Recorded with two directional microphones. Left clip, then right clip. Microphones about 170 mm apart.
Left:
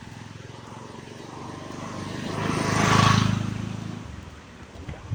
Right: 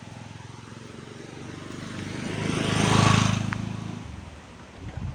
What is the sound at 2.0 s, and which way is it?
Vehicle, 10° right (ahead or behind).